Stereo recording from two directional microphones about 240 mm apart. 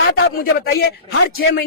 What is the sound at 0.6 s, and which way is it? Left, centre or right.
Speech, left.